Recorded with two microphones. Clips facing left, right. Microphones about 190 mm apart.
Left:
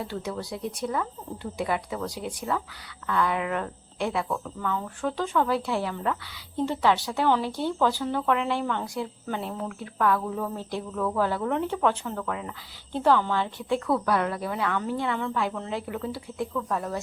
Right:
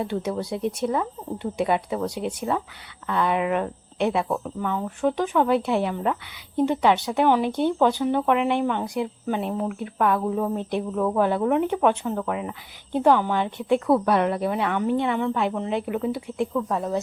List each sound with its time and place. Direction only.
0.0 s a woman's voice: 20° right (ahead or behind)